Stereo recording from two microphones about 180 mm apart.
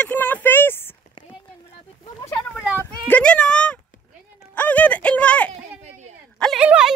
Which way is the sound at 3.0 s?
5° left (ahead or behind).